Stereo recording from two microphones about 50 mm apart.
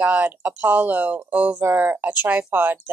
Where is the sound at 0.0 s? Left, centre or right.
Right.